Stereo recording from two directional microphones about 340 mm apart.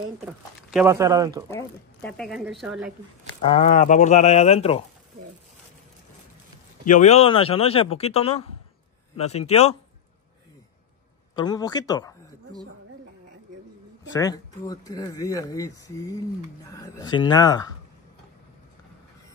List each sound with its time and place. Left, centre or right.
0.2 s speech: centre
1.5 s speech: centre
3.3 s speech: centre
6.8 s speech: left
11.3 s speech: centre
14.1 s speech: centre